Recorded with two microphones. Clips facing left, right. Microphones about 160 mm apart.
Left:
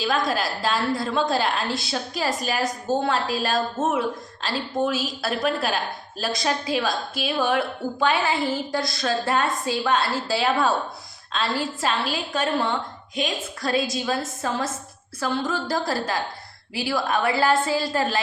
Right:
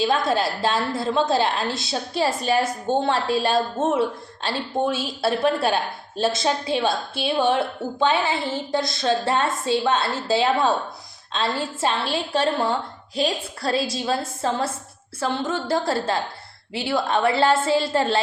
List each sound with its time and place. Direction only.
0.3 s a woman's voice: 25° right (ahead or behind)